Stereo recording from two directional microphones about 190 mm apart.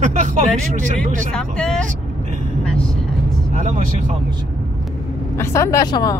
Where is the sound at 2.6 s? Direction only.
5° left (ahead or behind).